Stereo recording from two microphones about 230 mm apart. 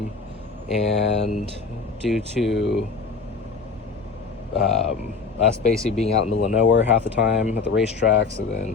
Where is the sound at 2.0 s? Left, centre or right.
Centre.